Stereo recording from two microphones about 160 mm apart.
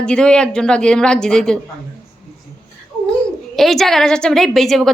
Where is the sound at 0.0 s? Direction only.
5° left (ahead or behind).